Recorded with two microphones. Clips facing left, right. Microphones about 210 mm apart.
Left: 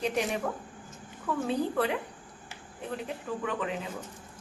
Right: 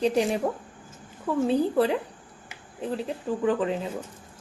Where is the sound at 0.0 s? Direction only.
30° right (ahead or behind).